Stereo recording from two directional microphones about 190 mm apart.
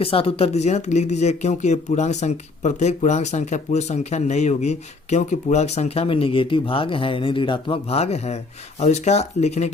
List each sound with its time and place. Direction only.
0.0 s speech: 30° left (ahead or behind)